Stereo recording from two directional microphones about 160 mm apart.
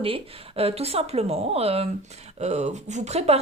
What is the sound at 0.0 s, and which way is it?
Speech, 35° right (ahead or behind).